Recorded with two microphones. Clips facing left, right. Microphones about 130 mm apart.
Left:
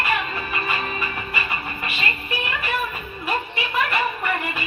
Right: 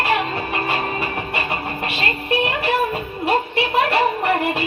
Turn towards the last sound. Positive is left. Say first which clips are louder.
# right 6 dB
turn(degrees=-70)  # may be behind; listen again after turning